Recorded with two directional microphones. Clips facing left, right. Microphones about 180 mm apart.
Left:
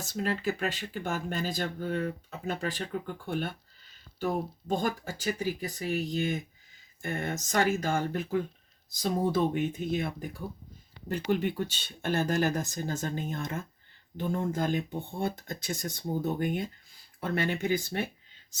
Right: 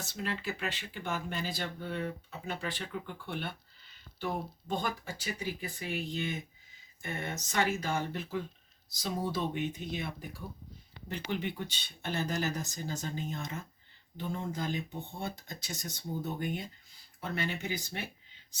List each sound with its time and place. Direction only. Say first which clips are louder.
0.1 s speech: left 8 dB; 45° left (ahead or behind)